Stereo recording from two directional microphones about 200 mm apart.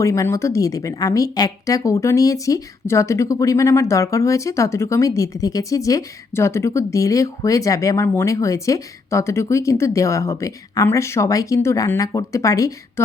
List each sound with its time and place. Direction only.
0.0 s speech: 15° left (ahead or behind)